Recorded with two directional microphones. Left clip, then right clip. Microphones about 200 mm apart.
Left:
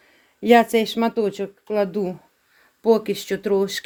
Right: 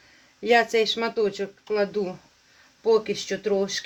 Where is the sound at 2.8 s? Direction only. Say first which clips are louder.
Left 3 dB; 60° left (ahead or behind).